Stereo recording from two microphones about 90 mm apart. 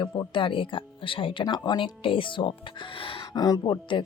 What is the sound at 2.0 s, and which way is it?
Speech, 75° left (ahead or behind).